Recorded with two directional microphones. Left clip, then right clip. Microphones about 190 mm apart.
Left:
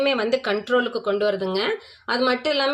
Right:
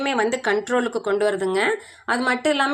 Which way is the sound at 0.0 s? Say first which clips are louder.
Even; 30° right (ahead or behind).